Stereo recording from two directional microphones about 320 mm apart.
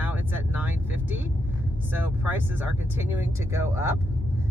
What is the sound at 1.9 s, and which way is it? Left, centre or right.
Speech, centre.